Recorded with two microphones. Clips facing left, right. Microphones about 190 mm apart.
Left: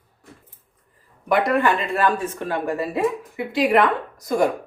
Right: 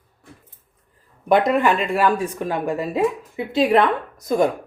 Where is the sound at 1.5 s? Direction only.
15° right (ahead or behind).